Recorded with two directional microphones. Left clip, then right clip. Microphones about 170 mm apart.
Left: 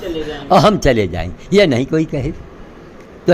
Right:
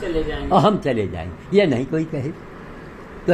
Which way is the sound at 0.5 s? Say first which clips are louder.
Left 6 dB; 55° left (ahead or behind).